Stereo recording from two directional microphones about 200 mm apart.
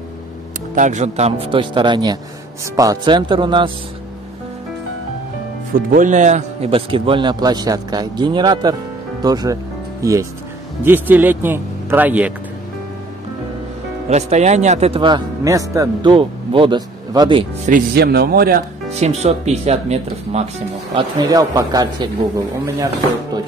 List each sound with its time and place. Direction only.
0.7 s speech: 35° right (ahead or behind)
5.8 s speech: 45° right (ahead or behind); by 12.3 s 10° right (ahead or behind)
14.0 s speech: 35° right (ahead or behind)
17.6 s speech: 50° right (ahead or behind)
18.9 s speech: 35° right (ahead or behind)
20.9 s speech: 20° right (ahead or behind)